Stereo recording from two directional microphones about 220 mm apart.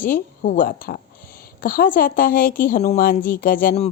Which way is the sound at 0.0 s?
40° left (ahead or behind).